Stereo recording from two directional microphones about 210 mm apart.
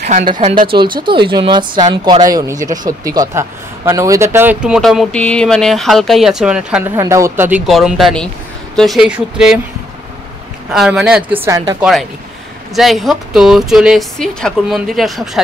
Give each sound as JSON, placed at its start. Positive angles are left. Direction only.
{"t": 0.0, "sound": "speech", "side_deg": -40}
{"t": 0.3, "sound": "a man's voice", "side_deg": -25}
{"t": 7.0, "sound": "a man's voice", "side_deg": -15}
{"t": 10.7, "sound": "a man's voice", "side_deg": 0}
{"t": 11.4, "sound": "speech", "side_deg": -15}
{"t": 11.8, "sound": "a man's voice", "side_deg": 0}